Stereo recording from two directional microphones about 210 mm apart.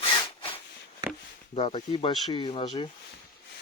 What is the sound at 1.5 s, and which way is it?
Speech, 25° left (ahead or behind).